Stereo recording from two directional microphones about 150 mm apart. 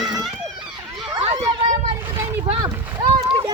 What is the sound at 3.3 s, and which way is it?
Run, 30° right (ahead or behind).